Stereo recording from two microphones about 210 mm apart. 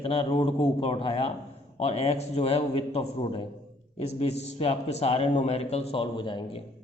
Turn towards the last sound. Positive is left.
turn(degrees=25)  # may be behind; listen again after turning